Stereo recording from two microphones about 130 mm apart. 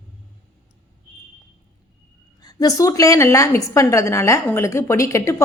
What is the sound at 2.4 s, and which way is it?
A woman's voice, 30° left (ahead or behind).